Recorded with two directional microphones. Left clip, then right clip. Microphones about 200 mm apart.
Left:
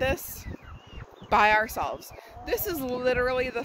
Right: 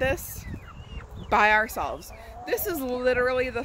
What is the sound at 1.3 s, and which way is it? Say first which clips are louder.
Speech: right 1 dB; 10° left (ahead or behind).